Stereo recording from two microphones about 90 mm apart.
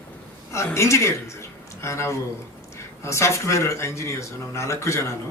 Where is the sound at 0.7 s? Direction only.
35° left (ahead or behind).